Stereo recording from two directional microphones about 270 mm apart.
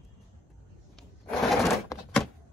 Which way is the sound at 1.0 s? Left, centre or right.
Centre.